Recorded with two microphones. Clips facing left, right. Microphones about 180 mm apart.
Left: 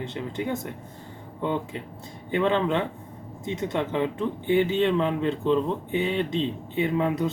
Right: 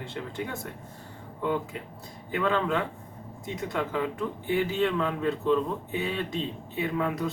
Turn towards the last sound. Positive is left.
turn(degrees=25)  # may be behind; listen again after turning